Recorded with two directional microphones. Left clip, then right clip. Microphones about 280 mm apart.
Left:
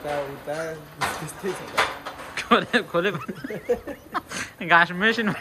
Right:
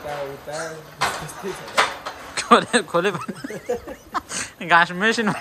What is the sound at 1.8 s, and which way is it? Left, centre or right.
Speech, right.